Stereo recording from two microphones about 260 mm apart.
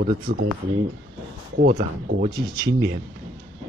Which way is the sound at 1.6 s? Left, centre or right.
Right.